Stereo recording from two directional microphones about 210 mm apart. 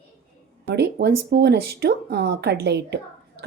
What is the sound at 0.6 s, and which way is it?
Speech, 55° right (ahead or behind).